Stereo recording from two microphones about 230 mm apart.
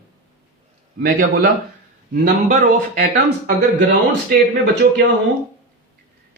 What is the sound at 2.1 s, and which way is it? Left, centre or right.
Speech, right.